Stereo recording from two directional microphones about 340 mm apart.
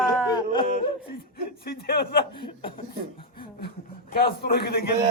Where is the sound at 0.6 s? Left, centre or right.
Left.